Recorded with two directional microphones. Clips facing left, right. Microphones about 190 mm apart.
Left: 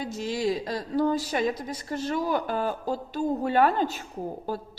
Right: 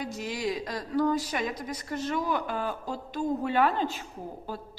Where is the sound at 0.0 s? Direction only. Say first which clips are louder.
Left 4 dB; 30° left (ahead or behind).